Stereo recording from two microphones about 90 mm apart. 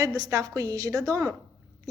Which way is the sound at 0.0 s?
40° right (ahead or behind).